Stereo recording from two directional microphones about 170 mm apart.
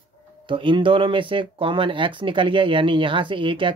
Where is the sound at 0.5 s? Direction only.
30° right (ahead or behind).